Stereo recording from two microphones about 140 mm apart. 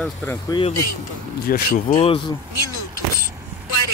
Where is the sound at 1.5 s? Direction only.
90° left.